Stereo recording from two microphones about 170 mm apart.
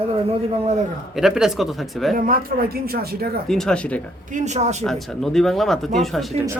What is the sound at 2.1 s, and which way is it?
Speech, 55° right (ahead or behind).